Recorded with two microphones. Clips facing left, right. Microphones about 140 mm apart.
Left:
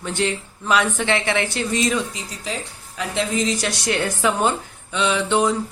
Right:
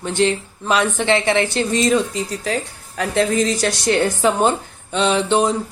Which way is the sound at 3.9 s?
30° right (ahead or behind).